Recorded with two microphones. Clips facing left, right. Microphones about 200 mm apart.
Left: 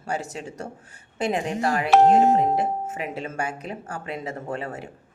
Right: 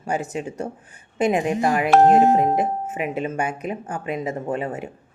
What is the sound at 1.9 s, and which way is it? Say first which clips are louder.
Speech: right 1 dB; centre (ahead or behind).